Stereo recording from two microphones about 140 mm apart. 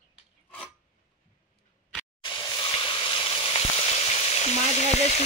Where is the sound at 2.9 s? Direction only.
40° left (ahead or behind).